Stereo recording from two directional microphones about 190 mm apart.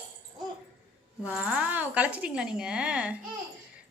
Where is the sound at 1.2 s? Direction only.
5° right (ahead or behind).